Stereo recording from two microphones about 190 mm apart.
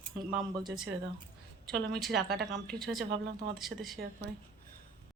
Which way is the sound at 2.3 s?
60° right (ahead or behind).